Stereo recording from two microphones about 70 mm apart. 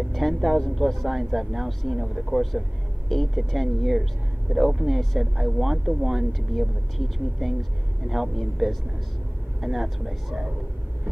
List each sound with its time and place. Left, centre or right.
0.1 s speech: centre